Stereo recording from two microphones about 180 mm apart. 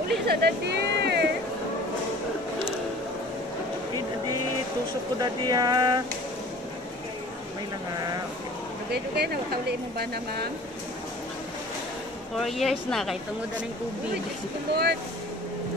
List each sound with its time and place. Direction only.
0.3 s speech: 60° right (ahead or behind)
5.5 s a sound: 20° right (ahead or behind)
8.9 s speech: 65° right (ahead or behind)
12.4 s speech: centre (ahead or behind)
14.7 s speech: 65° right (ahead or behind)